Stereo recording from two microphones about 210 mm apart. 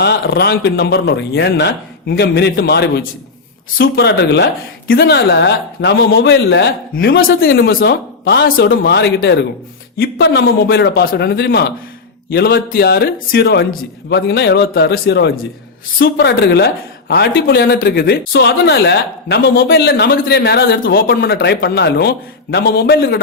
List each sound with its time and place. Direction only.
0.0 s a man's voice: 50° left (ahead or behind)